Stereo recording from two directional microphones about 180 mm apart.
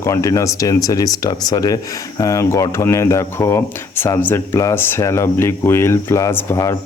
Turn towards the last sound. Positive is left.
turn(degrees=15)  # may be behind; listen again after turning